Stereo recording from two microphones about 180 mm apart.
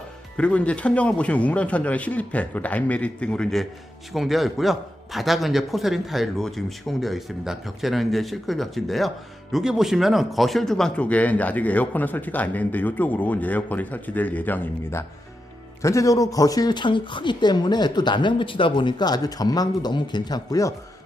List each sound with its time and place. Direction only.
0.3 s a man's voice: 5° left (ahead or behind)